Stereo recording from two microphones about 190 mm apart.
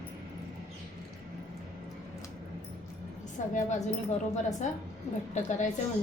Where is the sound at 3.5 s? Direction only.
40° left (ahead or behind).